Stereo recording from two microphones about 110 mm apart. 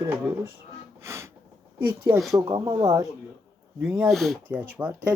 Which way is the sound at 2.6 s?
30° right (ahead or behind).